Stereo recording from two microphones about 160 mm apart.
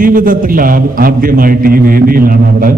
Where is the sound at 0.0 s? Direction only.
60° right (ahead or behind).